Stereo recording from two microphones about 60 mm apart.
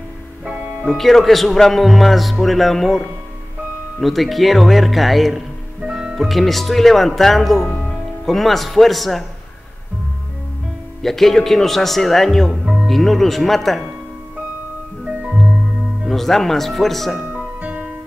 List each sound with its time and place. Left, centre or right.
0.8 s speech: centre
5.8 s music: centre
6.1 s speech: centre
11.0 s speech: centre
15.0 s music: centre
16.1 s speech: centre
17.2 s music: right